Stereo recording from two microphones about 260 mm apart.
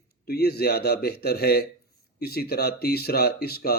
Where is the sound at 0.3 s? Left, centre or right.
Left.